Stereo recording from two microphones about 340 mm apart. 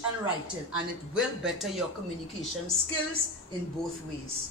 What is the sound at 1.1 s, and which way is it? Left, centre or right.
Speech, centre.